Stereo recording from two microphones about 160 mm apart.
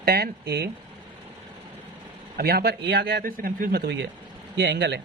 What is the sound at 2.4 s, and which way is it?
Speech, 75° right (ahead or behind).